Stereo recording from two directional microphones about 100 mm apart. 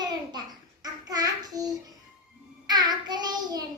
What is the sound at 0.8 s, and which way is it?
Child singing, 40° right (ahead or behind).